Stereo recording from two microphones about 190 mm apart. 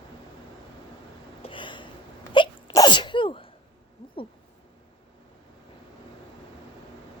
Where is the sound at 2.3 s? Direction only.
25° left (ahead or behind).